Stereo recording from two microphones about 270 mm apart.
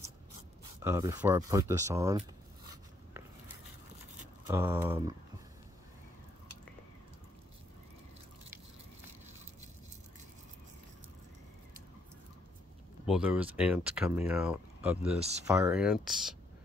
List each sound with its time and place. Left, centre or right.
0.7 s speech: centre
2.7 s a sound: centre
4.5 s speech: centre
13.0 s speech: centre
15.1 s speech: right
15.4 s speech: centre